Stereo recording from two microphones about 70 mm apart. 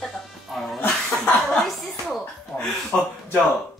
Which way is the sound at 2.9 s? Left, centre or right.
Centre.